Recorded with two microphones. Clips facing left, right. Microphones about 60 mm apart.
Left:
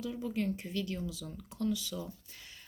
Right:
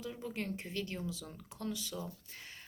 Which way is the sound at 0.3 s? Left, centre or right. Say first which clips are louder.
Left 5 dB; right.